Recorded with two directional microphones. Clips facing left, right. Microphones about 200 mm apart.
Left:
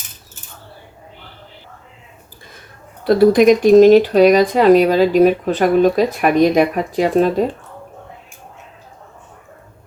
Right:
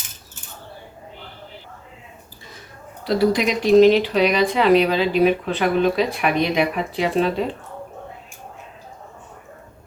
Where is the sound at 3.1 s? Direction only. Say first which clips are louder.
Left 9 dB; 50° left (ahead or behind).